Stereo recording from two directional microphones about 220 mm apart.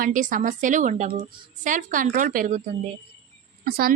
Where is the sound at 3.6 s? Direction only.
40° right (ahead or behind).